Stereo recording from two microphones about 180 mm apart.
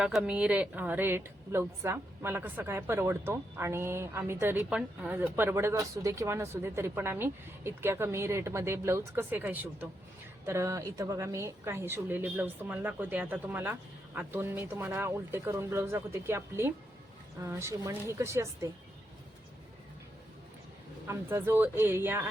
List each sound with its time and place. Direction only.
0.0 s a woman's voice: 5° right (ahead or behind)
21.1 s a woman's voice: 15° right (ahead or behind)